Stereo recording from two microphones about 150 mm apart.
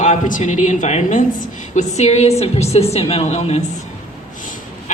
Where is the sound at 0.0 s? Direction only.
55° left (ahead or behind).